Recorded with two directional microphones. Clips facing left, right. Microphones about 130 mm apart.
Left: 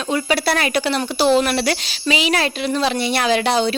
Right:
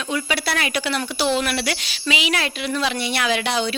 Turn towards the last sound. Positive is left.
turn(degrees=35)  # may be behind; listen again after turning